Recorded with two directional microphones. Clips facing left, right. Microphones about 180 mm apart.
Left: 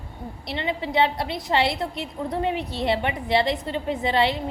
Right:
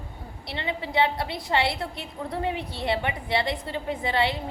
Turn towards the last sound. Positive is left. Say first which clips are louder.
# left 3 dB
turn(degrees=20)  # may be behind; listen again after turning